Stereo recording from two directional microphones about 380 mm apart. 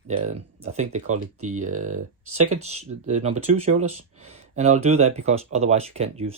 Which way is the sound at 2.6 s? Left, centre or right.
Centre.